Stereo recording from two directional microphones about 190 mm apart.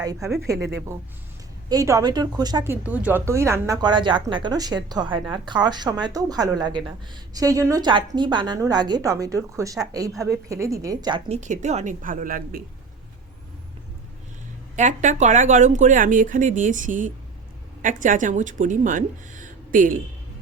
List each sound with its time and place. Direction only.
0.0 s a woman's voice: 15° right (ahead or behind)
2.8 s a woman's voice: 10° right (ahead or behind)
11.3 s speech: 40° right (ahead or behind)
14.8 s speech: 40° right (ahead or behind)